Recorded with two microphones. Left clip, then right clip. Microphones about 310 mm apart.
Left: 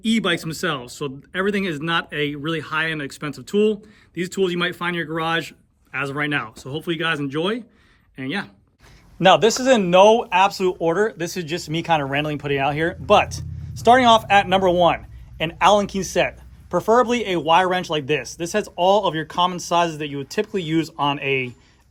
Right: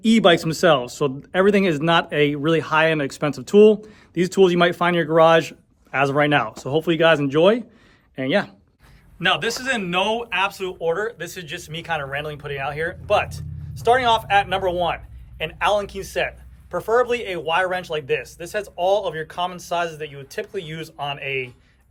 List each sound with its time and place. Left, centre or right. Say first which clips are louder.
0.0 s speech: right 6 dB; centre
9.1 s speech: left 6 dB; centre